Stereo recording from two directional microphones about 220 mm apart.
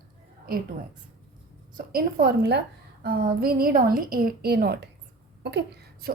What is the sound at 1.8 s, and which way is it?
A woman's voice, 45° right (ahead or behind).